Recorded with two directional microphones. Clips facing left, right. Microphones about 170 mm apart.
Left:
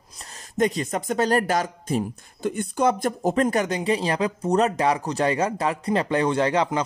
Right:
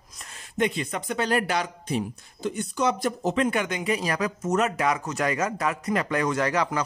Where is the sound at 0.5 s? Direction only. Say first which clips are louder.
Left 3 dB; 40° left (ahead or behind).